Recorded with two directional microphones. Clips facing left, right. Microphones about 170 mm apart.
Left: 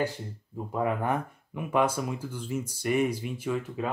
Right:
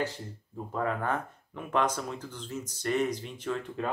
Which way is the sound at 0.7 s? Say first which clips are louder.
Left 3 dB; 15° left (ahead or behind).